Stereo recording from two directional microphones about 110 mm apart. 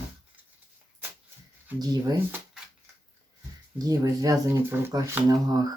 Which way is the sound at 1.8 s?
35° right (ahead or behind).